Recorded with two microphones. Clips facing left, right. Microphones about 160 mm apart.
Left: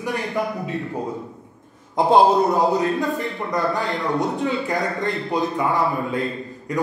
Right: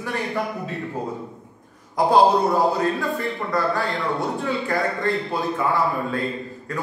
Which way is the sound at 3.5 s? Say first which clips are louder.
Left 1 dB; 20° left (ahead or behind).